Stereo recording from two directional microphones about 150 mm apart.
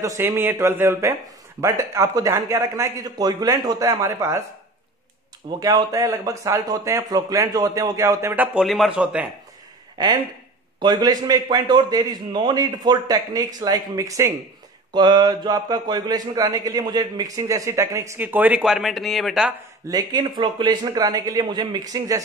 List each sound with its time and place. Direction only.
0.0 s speech: 20° right (ahead or behind)
5.6 s speech: 25° right (ahead or behind)
8.5 s speech: centre (ahead or behind)
10.8 s speech: 30° right (ahead or behind); by 19.5 s centre (ahead or behind)
19.9 s speech: 25° right (ahead or behind)